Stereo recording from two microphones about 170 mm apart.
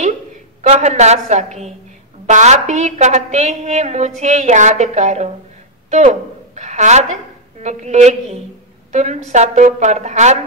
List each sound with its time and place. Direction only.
0.6 s a woman's voice: 40° right (ahead or behind)